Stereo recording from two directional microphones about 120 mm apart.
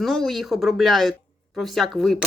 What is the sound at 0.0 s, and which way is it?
Speech, centre (ahead or behind).